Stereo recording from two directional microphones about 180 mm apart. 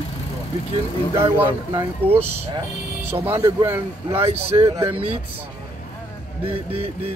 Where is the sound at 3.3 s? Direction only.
15° right (ahead or behind).